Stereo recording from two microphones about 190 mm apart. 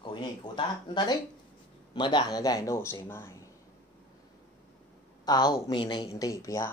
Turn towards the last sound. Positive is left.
turn(degrees=15)  # may be behind; listen again after turning